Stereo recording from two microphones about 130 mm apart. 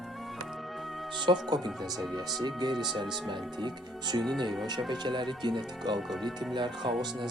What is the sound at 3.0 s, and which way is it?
Speech, 35° right (ahead or behind).